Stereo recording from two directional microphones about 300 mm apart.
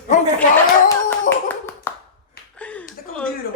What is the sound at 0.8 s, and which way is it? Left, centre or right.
Hands, centre.